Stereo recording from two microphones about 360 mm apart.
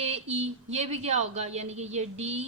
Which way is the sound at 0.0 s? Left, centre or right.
Centre.